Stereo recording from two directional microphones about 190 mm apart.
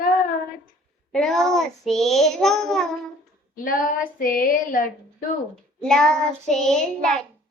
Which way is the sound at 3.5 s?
45° left (ahead or behind).